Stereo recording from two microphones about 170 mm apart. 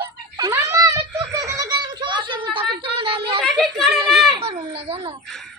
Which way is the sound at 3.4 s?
Centre (ahead or behind).